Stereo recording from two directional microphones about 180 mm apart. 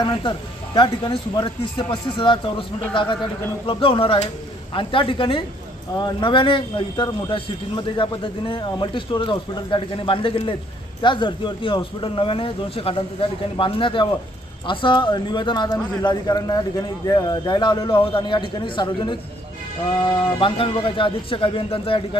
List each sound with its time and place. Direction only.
0.0 s a man's voice: 25° left (ahead or behind)
20.4 s a man's voice: 30° left (ahead or behind)